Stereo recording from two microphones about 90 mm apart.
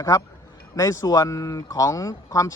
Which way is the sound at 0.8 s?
35° left (ahead or behind).